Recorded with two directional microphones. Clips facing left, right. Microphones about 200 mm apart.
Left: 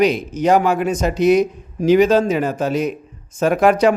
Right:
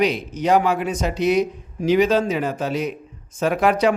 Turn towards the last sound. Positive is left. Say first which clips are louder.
# left 4 dB
turn(degrees=45)  # may be behind; listen again after turning